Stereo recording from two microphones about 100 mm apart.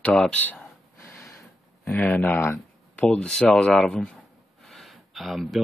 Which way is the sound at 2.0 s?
15° left (ahead or behind).